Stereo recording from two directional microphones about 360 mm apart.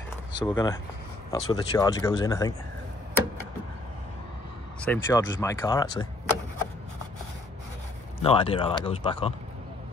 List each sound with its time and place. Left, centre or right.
0.3 s speech: centre
4.8 s speech: centre
8.2 s speech: centre